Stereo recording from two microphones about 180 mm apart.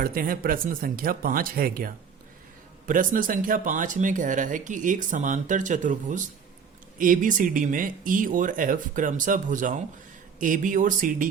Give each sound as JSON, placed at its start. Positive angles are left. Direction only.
{"t": 0.0, "sound": "speech", "side_deg": -55}